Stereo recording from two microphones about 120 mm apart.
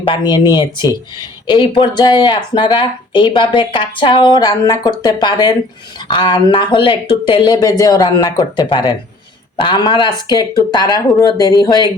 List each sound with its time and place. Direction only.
0.1 s speech: 40° left (ahead or behind)